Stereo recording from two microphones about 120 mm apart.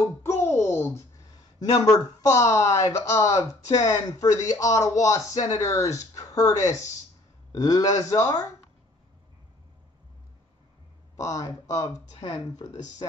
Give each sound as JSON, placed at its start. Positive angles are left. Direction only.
{"t": 0.2, "sound": "a sound", "side_deg": 20}
{"t": 1.6, "sound": "speech", "side_deg": 30}
{"t": 11.1, "sound": "speech", "side_deg": 30}